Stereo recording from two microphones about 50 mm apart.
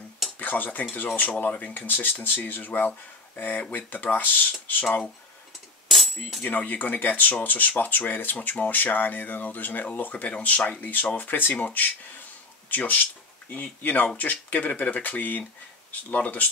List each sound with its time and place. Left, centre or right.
0.4 s speech: left
5.9 s coin: centre
6.4 s speech: left